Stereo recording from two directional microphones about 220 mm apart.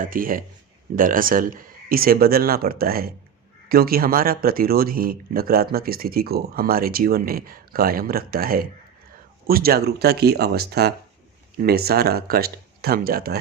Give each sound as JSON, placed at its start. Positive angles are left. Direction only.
{"t": 0.0, "sound": "speech", "side_deg": -40}